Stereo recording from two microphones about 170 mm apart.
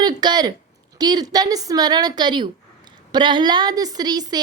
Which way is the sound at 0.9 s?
25° right (ahead or behind).